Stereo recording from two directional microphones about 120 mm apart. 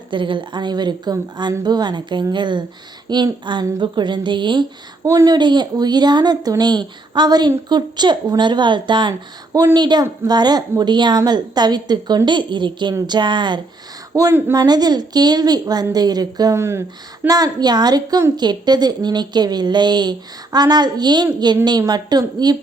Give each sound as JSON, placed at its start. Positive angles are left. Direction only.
{"t": 0.1, "sound": "a woman's voice", "side_deg": -45}
{"t": 5.0, "sound": "a woman's voice", "side_deg": -30}
{"t": 16.6, "sound": "speech", "side_deg": -20}
{"t": 17.2, "sound": "a woman's voice", "side_deg": -30}